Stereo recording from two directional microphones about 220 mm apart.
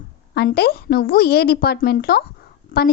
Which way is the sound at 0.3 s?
45° left (ahead or behind).